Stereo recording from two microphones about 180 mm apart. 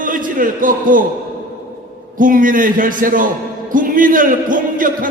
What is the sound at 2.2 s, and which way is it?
A man's voice, 50° right (ahead or behind).